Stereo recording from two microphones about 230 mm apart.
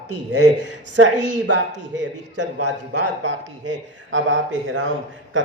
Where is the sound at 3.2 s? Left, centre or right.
Right.